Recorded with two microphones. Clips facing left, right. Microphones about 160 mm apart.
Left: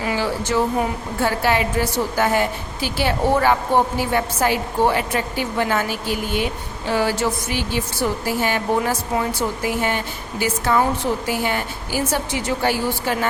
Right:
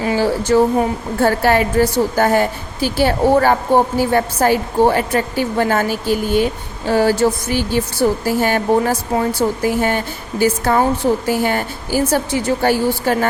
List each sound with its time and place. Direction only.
0.0 s a woman's voice: 30° right (ahead or behind)